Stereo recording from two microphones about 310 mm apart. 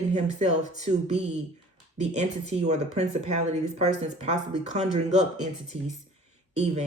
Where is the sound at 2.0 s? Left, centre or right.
Right.